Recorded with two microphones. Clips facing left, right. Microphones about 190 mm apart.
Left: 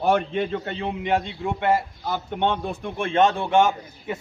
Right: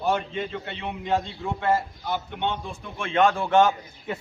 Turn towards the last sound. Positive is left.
turn(degrees=15)  # may be behind; listen again after turning